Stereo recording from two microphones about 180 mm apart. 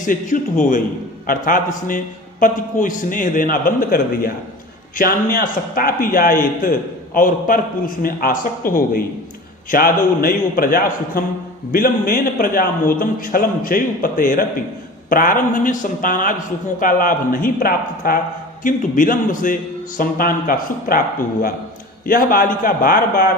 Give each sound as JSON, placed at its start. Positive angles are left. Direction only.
{"t": 0.0, "sound": "a man's voice", "side_deg": 45}
{"t": 22.0, "sound": "a man's voice", "side_deg": 50}